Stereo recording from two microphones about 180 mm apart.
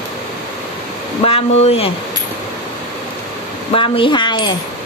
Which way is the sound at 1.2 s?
35° left (ahead or behind).